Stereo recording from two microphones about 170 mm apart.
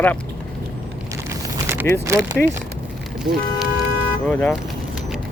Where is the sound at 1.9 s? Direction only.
10° left (ahead or behind).